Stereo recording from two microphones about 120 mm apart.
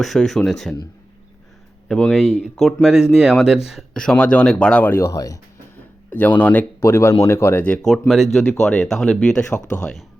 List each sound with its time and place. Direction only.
0.0 s speech: centre (ahead or behind)
1.9 s speech: 5° left (ahead or behind); by 5.4 s 30° left (ahead or behind)
6.1 s speech: 15° left (ahead or behind)
7.9 s speech: centre (ahead or behind)